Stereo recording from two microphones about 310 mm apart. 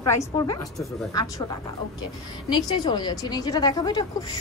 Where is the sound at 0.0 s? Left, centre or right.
Centre.